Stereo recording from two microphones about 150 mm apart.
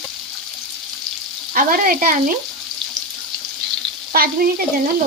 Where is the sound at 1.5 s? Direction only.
65° right (ahead or behind).